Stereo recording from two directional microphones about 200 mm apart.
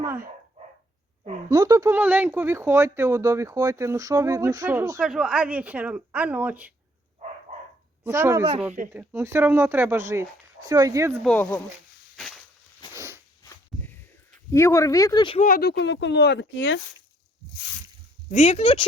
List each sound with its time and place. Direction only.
0.0 s speech: 10° right (ahead or behind)
1.5 s speech: 15° right (ahead or behind)
8.0 s speech: 15° right (ahead or behind)
11.2 s speech: 5° left (ahead or behind)
13.0 s a sound: 15° right (ahead or behind)
13.4 s a sound: 15° left (ahead or behind)
14.5 s speech: 15° left (ahead or behind)
15.4 s speech: 45° left (ahead or behind); by 16.8 s 65° left (ahead or behind)
18.3 s speech: 30° left (ahead or behind)